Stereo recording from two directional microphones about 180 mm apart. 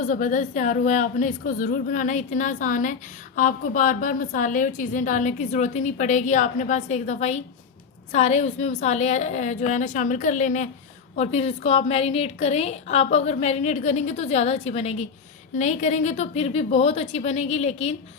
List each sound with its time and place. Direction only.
0.0 s a woman's voice: 45° left (ahead or behind)